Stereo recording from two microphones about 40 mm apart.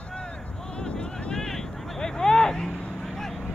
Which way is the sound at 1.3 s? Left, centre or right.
Centre.